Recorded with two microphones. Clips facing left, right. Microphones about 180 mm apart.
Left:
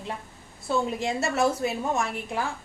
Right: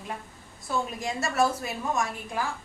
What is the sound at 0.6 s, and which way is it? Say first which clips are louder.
A woman's voice: left 4 dB; 25° left (ahead or behind).